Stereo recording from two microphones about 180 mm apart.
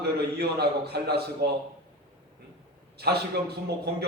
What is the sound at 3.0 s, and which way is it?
Speech, 60° right (ahead or behind).